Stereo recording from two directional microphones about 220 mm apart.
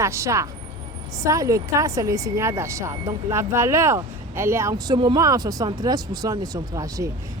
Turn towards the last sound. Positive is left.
turn(degrees=-15)  # may be behind; listen again after turning